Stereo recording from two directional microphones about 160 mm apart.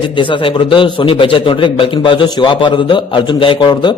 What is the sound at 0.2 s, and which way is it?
A man's voice, 30° left (ahead or behind).